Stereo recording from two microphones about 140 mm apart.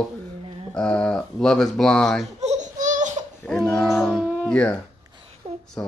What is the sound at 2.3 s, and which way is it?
Laughter, 55° right (ahead or behind).